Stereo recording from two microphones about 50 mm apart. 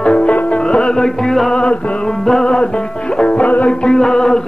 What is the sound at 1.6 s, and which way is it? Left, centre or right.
Music, left.